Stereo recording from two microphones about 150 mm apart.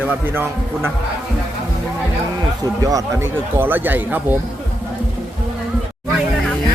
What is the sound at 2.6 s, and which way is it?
A man's voice, 25° right (ahead or behind).